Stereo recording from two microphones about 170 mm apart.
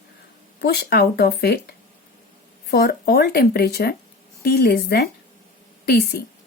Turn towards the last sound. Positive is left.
turn(degrees=70)  # may be behind; listen again after turning